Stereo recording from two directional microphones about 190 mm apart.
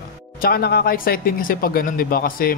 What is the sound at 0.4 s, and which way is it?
Speech, 55° left (ahead or behind).